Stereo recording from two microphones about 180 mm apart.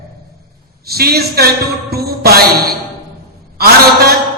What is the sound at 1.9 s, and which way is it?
Music, 60° right (ahead or behind).